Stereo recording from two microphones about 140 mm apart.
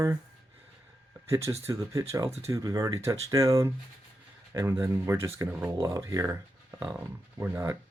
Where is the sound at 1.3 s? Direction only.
20° right (ahead or behind).